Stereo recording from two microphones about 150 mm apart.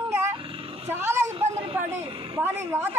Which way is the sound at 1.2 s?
50° right (ahead or behind).